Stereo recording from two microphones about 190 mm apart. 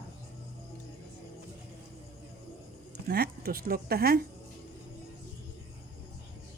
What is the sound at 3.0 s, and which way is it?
Speech, 55° right (ahead or behind).